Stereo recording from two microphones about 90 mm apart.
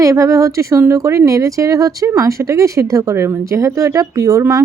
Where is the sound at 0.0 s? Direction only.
35° right (ahead or behind).